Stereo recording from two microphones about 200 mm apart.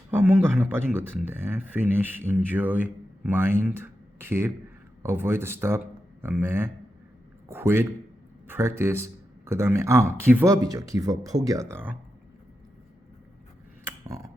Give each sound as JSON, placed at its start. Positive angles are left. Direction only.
{"t": 0.1, "sound": "a man's voice", "side_deg": -10}